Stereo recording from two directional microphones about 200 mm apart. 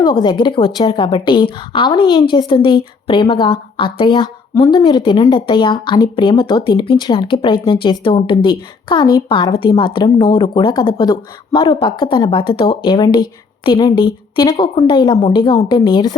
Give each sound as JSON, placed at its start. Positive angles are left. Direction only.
{"t": 0.0, "sound": "speech", "side_deg": 20}